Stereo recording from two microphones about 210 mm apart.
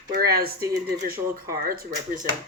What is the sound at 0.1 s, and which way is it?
Speech, 45° right (ahead or behind).